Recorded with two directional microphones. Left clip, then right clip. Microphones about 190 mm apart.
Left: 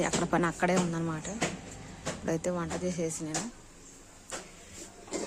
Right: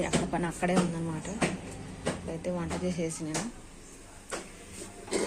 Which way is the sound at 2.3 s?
30° left (ahead or behind).